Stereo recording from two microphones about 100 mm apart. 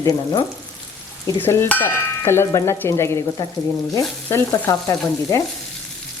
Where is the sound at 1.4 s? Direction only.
20° left (ahead or behind).